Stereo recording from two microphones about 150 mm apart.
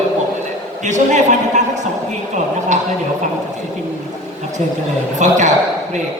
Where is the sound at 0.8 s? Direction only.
55° right (ahead or behind).